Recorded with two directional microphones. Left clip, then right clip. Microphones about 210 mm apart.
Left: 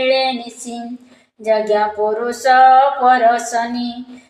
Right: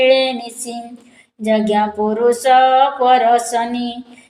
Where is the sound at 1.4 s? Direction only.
30° right (ahead or behind).